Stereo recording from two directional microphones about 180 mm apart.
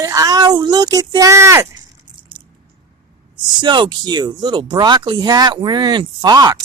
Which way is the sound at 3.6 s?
25° right (ahead or behind).